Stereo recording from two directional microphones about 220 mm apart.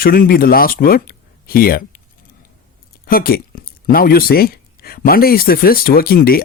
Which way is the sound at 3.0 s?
45° left (ahead or behind).